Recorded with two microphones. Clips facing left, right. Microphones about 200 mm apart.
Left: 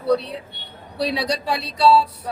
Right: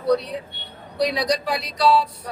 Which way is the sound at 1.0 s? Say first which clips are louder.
Right 2 dB; 30° left (ahead or behind).